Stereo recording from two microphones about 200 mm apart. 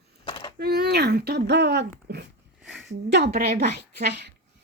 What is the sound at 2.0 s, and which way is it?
Dog, 55° right (ahead or behind).